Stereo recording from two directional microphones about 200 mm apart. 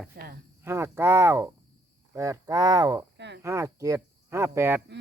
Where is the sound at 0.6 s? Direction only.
10° right (ahead or behind).